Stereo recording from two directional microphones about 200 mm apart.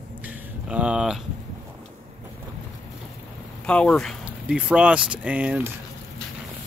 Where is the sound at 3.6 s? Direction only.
5° left (ahead or behind).